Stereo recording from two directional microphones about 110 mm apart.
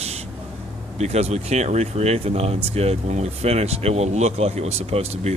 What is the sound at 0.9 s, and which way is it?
Speech, 80° right.